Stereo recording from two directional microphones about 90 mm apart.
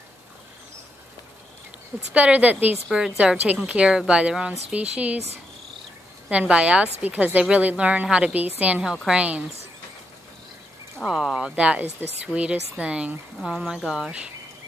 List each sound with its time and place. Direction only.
2.1 s a woman's voice: 15° right (ahead or behind)
2.9 s a woman's voice: 5° right (ahead or behind)
6.2 s a woman's voice: 10° right (ahead or behind)
11.1 s a woman's voice: 5° right (ahead or behind)